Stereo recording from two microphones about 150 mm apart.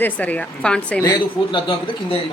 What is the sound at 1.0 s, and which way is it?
Speech, 25° left (ahead or behind).